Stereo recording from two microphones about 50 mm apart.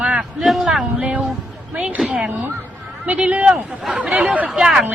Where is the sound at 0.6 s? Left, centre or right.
Centre.